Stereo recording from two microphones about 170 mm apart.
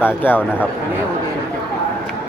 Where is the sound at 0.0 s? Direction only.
10° left (ahead or behind).